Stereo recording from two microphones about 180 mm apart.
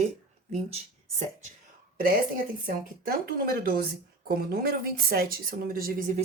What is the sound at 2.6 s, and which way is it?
Speech, 55° right (ahead or behind).